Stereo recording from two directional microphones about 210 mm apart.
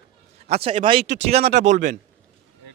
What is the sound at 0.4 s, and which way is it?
Speech, 30° right (ahead or behind).